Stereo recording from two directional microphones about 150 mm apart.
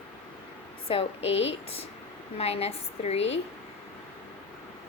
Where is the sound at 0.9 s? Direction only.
40° left (ahead or behind).